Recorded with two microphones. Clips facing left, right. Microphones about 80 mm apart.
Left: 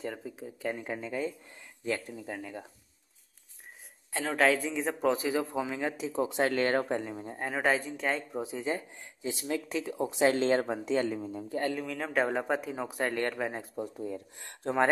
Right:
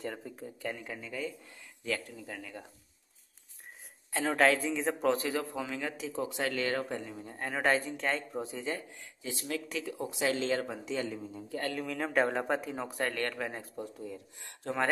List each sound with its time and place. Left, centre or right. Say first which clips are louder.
0.0 s speech: left 2 dB; centre
0.7 s a man's voice: left 5 dB; left
4.1 s a man's voice: even; centre; by 7.2 s left
7.4 s speech: left 1 dB; centre
8.5 s a man's voice: left 4 dB; left
11.8 s speech: even; centre
13.0 s a man's voice: left 3 dB; centre
14.0 s speech: left 5 dB; left
14.6 s a man's voice: left 5 dB; left